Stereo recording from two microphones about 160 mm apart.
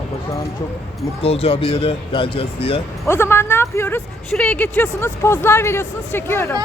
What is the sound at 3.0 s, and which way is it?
A woman's voice, 15° left (ahead or behind).